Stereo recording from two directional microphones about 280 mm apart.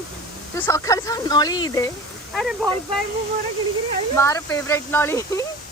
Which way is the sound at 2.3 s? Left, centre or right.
Centre.